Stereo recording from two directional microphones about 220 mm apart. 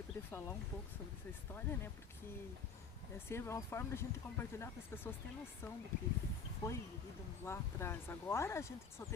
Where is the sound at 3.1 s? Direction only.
10° left (ahead or behind).